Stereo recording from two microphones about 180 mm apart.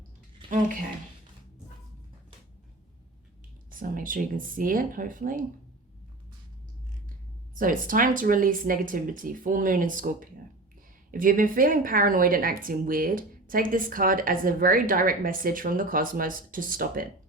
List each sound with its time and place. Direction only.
0.4 s a sound: 25° right (ahead or behind)
3.7 s speech: 50° right (ahead or behind)
7.5 s speech: 50° right (ahead or behind)